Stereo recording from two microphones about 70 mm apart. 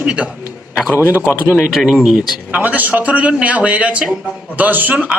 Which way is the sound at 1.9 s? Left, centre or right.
Centre.